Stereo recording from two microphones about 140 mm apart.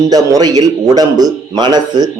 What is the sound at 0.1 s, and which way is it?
Speech, 25° right (ahead or behind).